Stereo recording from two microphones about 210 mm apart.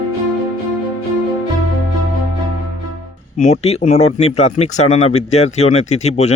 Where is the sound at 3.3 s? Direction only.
30° left (ahead or behind).